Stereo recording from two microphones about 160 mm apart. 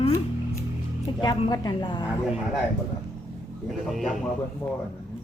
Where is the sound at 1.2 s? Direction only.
25° left (ahead or behind).